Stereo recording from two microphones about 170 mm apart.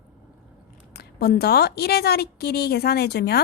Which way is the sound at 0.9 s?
65° left (ahead or behind).